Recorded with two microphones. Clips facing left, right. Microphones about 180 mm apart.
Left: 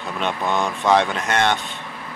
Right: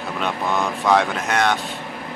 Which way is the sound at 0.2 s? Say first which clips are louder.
Left 1 dB; centre (ahead or behind).